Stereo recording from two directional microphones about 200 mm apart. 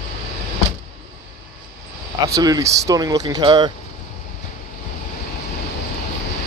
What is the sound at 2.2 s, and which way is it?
Speech, 20° right (ahead or behind).